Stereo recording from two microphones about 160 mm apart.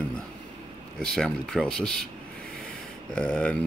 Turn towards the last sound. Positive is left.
turn(degrees=5)  # may be behind; listen again after turning